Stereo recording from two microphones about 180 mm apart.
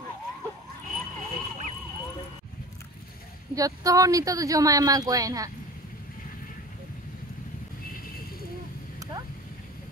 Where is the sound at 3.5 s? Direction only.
20° right (ahead or behind).